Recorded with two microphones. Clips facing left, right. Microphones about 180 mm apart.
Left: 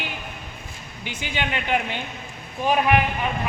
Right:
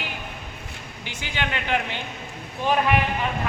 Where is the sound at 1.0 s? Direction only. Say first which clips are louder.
Left 2 dB; 15° left (ahead or behind).